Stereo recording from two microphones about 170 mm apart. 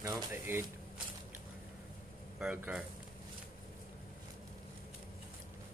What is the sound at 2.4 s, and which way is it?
Speech, 10° right (ahead or behind).